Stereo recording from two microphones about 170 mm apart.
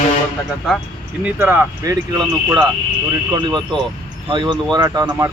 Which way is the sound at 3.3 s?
25° right (ahead or behind).